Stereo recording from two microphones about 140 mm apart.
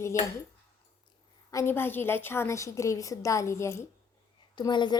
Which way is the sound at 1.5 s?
15° left (ahead or behind).